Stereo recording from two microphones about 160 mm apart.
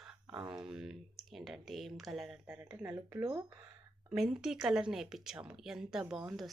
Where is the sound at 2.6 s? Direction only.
15° right (ahead or behind).